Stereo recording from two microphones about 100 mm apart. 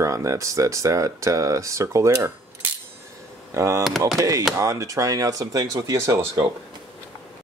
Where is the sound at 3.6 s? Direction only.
35° right (ahead or behind).